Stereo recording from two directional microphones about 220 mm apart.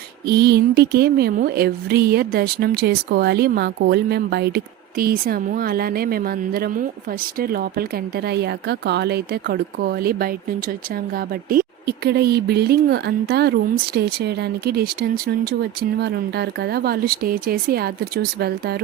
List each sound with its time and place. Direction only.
0.3 s speech: 45° right (ahead or behind)